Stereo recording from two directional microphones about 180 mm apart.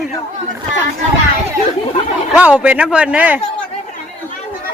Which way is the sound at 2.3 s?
5° right (ahead or behind).